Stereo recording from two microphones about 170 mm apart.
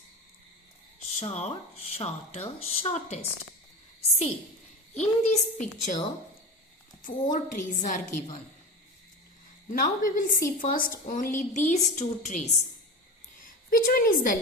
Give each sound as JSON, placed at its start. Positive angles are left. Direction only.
{"t": 1.2, "sound": "speech", "side_deg": 35}
{"t": 4.9, "sound": "a woman's voice", "side_deg": 45}
{"t": 7.0, "sound": "a woman's voice", "side_deg": 50}
{"t": 9.6, "sound": "a woman's voice", "side_deg": 50}
{"t": 13.4, "sound": "a woman's voice", "side_deg": 55}